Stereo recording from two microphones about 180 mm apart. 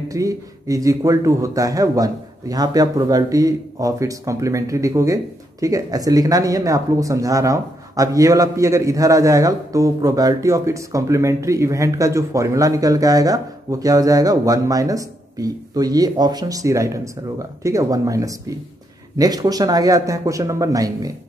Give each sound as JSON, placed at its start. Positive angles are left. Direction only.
{"t": 0.1, "sound": "speech", "side_deg": -20}